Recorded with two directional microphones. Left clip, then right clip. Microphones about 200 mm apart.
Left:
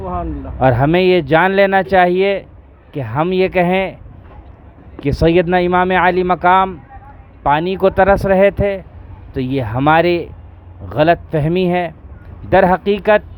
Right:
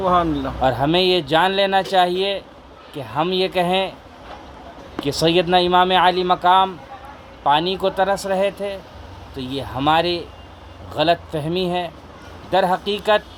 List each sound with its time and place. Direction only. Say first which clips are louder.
0.0 s speech: right 6 dB; 40° right (ahead or behind)
0.6 s speech: left 5 dB; 45° left (ahead or behind)
5.0 s speech: left 4 dB; 45° left (ahead or behind)